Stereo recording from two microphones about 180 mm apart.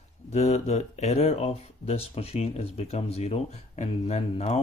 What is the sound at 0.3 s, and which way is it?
Speech, 40° left (ahead or behind).